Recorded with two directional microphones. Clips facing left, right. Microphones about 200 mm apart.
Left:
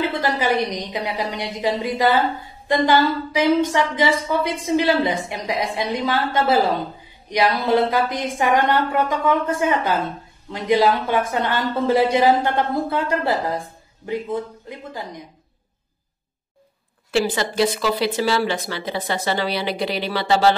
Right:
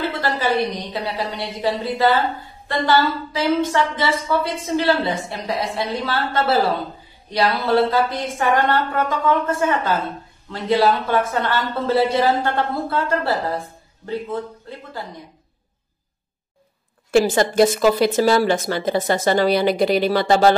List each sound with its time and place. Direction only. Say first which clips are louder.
0.2 s a woman's voice: even; 15° left (ahead or behind)
17.1 s speech: right 5 dB; 45° right (ahead or behind)